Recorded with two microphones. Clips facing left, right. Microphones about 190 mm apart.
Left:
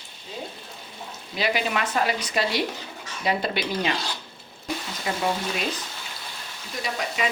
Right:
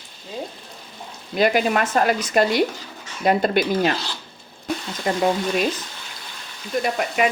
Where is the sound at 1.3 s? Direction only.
50° right (ahead or behind).